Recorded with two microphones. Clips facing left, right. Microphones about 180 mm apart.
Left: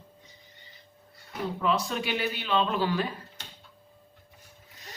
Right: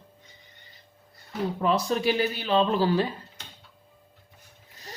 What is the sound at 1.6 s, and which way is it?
Speech, 40° right (ahead or behind).